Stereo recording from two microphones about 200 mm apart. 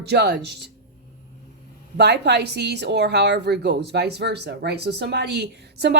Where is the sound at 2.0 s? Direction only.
55° right (ahead or behind).